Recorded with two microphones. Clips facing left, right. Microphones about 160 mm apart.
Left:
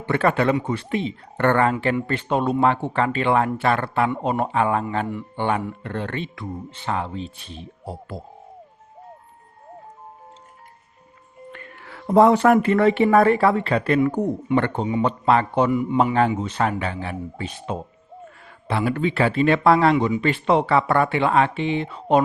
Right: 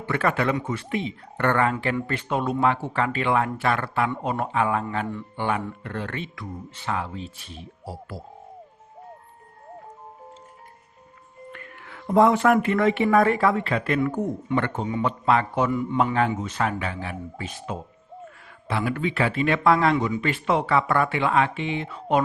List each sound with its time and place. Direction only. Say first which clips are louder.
0.0 s speech: left 4 dB; 30° left (ahead or behind)
11.5 s speech: left 2 dB; 30° left (ahead or behind)
15.7 s a man's voice: left 4 dB; 15° left (ahead or behind)
16.4 s speech: left 3 dB; 30° left (ahead or behind)